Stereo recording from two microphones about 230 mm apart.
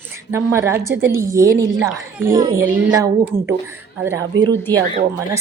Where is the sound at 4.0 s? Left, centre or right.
Centre.